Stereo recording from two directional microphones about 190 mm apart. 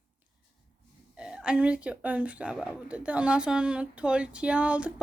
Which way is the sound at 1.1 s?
5° right (ahead or behind).